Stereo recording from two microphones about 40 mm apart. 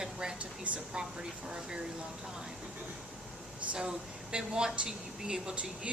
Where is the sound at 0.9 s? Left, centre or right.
Right.